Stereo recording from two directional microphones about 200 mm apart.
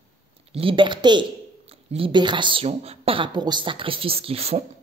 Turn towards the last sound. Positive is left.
turn(degrees=-30)  # may be behind; listen again after turning